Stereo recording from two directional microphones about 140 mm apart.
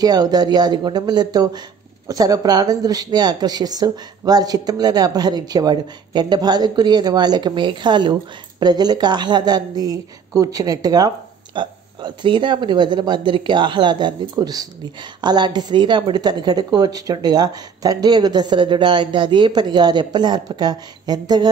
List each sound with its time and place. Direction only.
0.0 s a woman's voice: 30° right (ahead or behind)